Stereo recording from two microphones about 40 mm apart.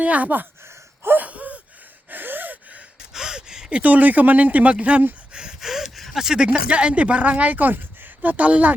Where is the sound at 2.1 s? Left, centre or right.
Right.